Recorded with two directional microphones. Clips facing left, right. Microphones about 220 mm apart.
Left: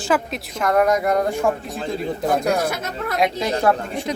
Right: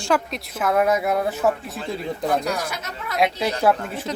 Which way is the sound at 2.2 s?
50° left (ahead or behind).